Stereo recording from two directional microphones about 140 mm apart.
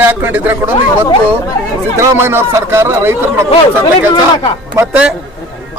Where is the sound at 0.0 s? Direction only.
15° right (ahead or behind).